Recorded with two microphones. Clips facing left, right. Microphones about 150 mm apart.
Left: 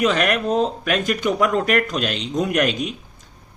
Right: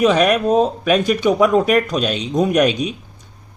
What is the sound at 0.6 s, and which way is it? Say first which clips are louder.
Speech: right 5 dB; 5° right (ahead or behind).